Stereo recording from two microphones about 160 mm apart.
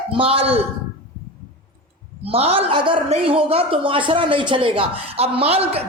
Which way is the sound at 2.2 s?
35° right (ahead or behind).